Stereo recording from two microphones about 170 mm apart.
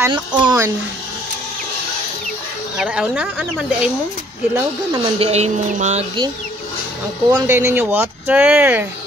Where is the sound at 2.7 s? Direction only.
5° right (ahead or behind).